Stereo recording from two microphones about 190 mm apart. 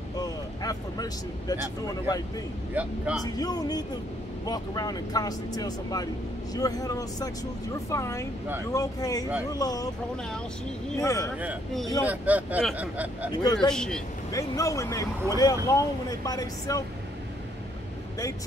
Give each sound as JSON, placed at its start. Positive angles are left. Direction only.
{"t": 0.2, "sound": "vehicle", "side_deg": 20}
{"t": 2.7, "sound": "speech", "side_deg": -5}
{"t": 3.3, "sound": "speech", "side_deg": 20}
{"t": 11.0, "sound": "speech", "side_deg": 15}
{"t": 11.3, "sound": "speech", "side_deg": -5}
{"t": 13.3, "sound": "speech", "side_deg": 20}
{"t": 13.7, "sound": "speech", "side_deg": 5}
{"t": 14.3, "sound": "speech", "side_deg": 15}